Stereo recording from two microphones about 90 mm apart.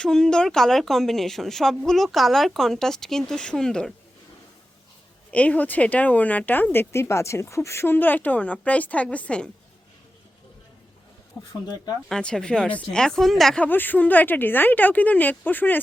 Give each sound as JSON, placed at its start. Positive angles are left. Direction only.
{"t": 0.0, "sound": "a woman's voice", "side_deg": 10}
{"t": 5.3, "sound": "speech", "side_deg": 15}
{"t": 12.0, "sound": "speech", "side_deg": 10}
{"t": 13.6, "sound": "speech", "side_deg": 20}